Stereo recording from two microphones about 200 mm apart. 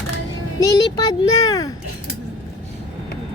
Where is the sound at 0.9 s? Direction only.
20° left (ahead or behind).